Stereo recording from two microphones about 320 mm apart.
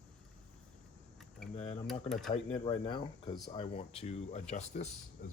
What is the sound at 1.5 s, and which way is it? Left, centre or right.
Cutlery, centre.